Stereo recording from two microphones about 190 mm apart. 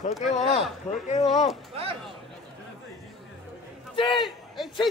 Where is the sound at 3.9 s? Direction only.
25° left (ahead or behind).